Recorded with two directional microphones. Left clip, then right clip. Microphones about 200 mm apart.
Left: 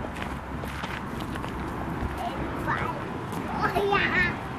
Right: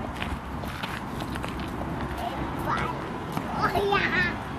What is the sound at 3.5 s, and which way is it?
Children playing, 5° right (ahead or behind).